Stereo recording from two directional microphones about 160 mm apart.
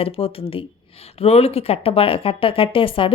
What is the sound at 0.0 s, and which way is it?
Speech, 35° left (ahead or behind).